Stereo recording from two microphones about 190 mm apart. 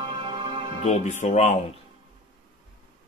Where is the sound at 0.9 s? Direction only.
35° left (ahead or behind).